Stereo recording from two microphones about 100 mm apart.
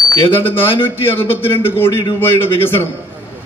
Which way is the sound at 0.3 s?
20° left (ahead or behind).